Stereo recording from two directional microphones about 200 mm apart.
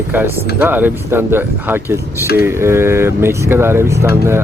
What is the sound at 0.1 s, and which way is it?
Speech, 10° right (ahead or behind).